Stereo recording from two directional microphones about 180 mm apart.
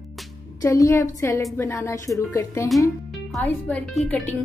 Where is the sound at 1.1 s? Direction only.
15° left (ahead or behind).